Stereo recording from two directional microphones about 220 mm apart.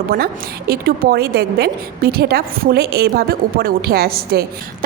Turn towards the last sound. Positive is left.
turn(degrees=-45)  # may be behind; listen again after turning